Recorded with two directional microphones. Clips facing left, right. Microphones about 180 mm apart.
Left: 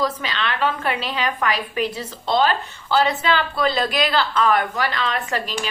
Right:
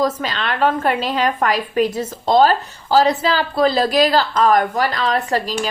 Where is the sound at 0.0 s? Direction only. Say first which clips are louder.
Right 4 dB; 45° right (ahead or behind).